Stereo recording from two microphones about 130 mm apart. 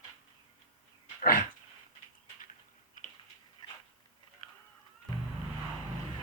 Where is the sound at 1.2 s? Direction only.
90° left.